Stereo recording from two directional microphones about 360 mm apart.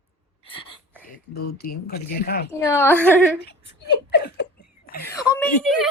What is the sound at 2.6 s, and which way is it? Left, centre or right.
Speech, centre.